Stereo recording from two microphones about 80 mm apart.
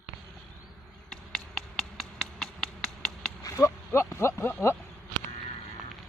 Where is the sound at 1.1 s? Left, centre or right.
Centre.